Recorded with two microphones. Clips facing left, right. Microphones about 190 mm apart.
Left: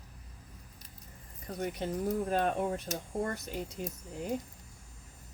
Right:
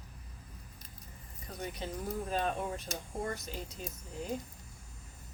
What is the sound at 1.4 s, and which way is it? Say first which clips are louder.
A woman's voice: left 5 dB; 55° left (ahead or behind).